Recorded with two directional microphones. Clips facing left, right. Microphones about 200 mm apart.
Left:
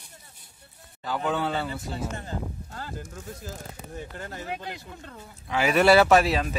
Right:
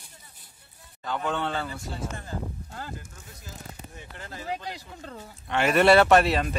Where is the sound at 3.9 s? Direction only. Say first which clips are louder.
Left 9 dB; 40° left (ahead or behind).